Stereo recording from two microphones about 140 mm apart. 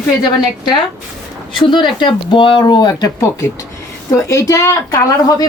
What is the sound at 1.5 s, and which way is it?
A woman's voice, 35° left (ahead or behind).